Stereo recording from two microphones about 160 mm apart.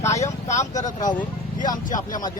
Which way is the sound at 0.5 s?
20° left (ahead or behind).